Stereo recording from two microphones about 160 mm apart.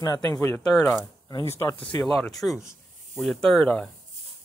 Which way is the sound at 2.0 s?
Centre (ahead or behind).